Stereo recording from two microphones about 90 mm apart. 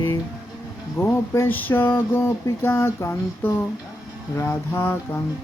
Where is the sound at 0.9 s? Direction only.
25° left (ahead or behind).